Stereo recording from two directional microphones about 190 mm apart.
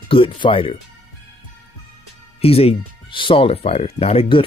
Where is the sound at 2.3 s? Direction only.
30° left (ahead or behind).